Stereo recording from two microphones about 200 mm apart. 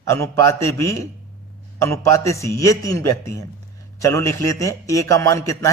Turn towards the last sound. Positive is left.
turn(degrees=15)  # may be behind; listen again after turning